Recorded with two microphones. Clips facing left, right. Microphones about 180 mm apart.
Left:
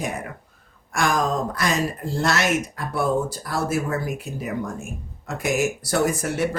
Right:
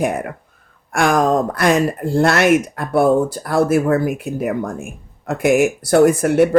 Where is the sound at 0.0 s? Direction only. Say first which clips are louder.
Right 9 dB; 60° right (ahead or behind).